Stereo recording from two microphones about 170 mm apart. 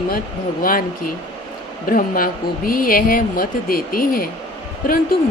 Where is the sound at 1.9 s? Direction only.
55° left (ahead or behind).